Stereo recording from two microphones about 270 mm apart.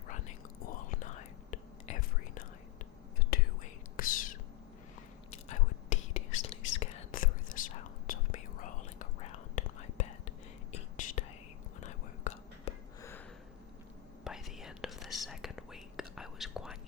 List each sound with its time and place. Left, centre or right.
0.1 s whispering: left
13.0 s sniff: centre
14.3 s whispering: centre